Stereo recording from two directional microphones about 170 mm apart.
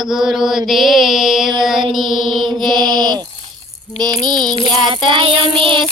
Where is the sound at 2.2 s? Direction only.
30° right (ahead or behind).